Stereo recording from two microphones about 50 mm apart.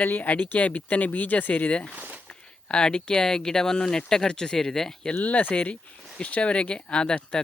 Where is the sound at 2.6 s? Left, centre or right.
Centre.